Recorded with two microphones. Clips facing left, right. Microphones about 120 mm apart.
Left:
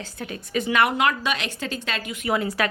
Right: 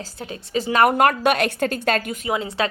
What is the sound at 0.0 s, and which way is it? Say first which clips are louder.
A woman's voice: right 1 dB; 30° right (ahead or behind).